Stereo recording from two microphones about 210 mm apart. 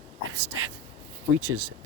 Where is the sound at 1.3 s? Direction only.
90° right.